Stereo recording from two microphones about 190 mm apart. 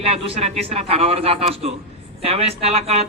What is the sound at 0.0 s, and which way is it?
Speech, 30° right (ahead or behind).